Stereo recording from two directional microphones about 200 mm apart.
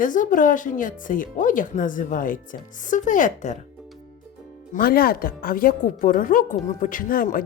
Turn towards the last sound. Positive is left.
turn(degrees=45)  # may be behind; listen again after turning